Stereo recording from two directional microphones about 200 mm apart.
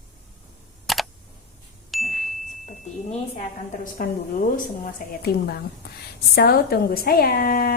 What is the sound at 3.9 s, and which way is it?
A woman's voice, 45° left (ahead or behind).